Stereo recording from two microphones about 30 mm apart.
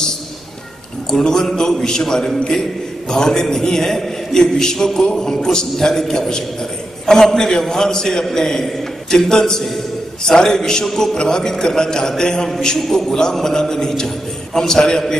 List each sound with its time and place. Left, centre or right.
1.1 s a man's voice: centre